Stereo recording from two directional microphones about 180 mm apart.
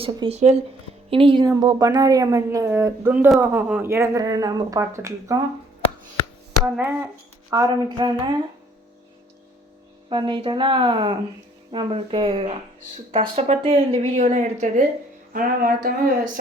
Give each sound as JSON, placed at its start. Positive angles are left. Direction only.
{"t": 0.0, "sound": "a woman's voice", "side_deg": -35}
{"t": 6.7, "sound": "a woman's voice", "side_deg": -10}
{"t": 7.5, "sound": "a woman's voice", "side_deg": -20}
{"t": 10.1, "sound": "a woman's voice", "side_deg": -25}